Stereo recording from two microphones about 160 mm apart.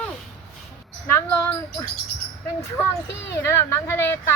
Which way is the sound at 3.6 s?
15° left (ahead or behind).